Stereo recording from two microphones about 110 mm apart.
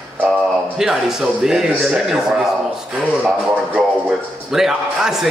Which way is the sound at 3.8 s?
Centre (ahead or behind).